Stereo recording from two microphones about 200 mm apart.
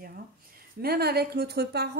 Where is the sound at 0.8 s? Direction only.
50° right (ahead or behind).